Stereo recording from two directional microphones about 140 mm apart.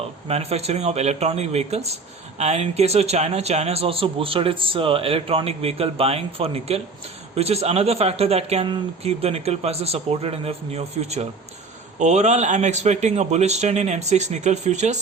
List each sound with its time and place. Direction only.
0.3 s a man's voice: 45° right (ahead or behind)